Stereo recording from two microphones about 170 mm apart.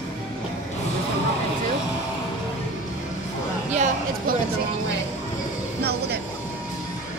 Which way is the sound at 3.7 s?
45° right (ahead or behind).